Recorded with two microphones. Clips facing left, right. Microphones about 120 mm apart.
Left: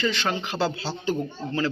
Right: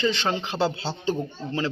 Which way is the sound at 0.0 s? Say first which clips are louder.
Right 1 dB; 25° right (ahead or behind).